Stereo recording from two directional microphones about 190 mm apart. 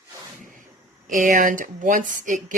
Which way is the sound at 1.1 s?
45° right (ahead or behind).